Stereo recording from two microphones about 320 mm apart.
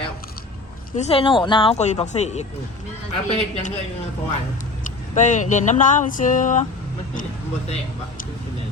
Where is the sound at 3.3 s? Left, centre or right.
Centre.